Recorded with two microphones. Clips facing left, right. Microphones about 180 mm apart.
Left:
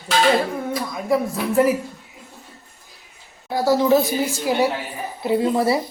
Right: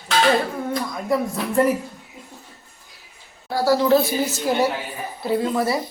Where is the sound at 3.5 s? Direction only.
20° left (ahead or behind).